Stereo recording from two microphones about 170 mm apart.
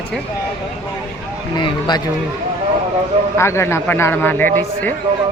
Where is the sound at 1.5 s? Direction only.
25° left (ahead or behind).